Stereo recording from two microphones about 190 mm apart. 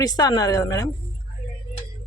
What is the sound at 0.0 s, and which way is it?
Speech, 20° left (ahead or behind).